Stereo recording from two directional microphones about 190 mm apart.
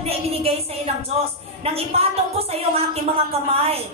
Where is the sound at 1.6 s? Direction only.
30° right (ahead or behind).